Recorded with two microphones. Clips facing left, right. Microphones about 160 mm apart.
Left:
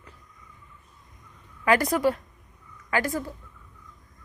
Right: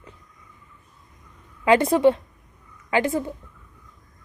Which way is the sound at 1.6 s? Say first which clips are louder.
Right 5 dB; 25° right (ahead or behind).